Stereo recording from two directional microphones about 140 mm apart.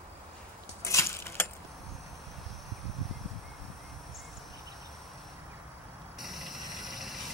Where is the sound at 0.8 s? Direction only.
20° left (ahead or behind).